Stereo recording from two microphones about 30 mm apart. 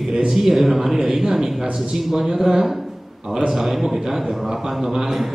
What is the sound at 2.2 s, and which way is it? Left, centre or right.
A man's voice, right.